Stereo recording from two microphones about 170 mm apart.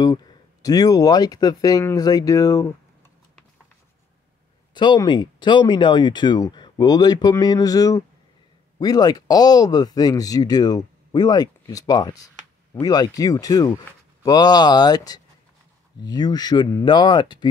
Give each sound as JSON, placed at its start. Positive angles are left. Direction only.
{"t": 0.0, "sound": "speech", "side_deg": 25}
{"t": 4.7, "sound": "speech", "side_deg": 25}